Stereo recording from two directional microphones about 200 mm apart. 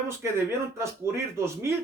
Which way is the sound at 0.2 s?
15° right (ahead or behind).